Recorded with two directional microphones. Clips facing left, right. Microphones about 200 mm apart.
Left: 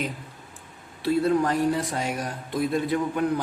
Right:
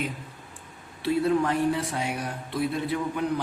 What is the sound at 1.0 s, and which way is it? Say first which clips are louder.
Speech: left 1 dB; 40° left (ahead or behind).